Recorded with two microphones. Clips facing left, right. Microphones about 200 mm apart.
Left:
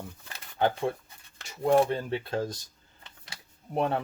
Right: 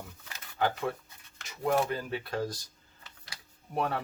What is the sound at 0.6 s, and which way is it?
Speech, 25° left (ahead or behind).